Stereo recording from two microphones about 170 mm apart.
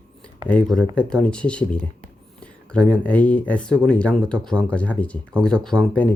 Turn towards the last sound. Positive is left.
turn(degrees=5)  # may be behind; listen again after turning